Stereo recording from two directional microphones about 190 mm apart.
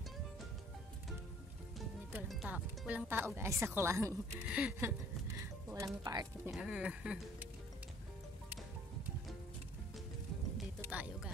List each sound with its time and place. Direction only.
2.2 s music: centre (ahead or behind)
3.1 s a woman's voice: 10° right (ahead or behind)
5.4 s music: 15° right (ahead or behind)
6.0 s a woman's voice: 15° right (ahead or behind)
6.5 s speech: 5° right (ahead or behind)
10.6 s music: 5° right (ahead or behind)